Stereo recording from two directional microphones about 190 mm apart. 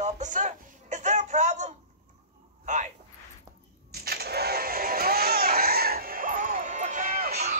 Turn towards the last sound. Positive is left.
turn(degrees=-50)  # may be behind; listen again after turning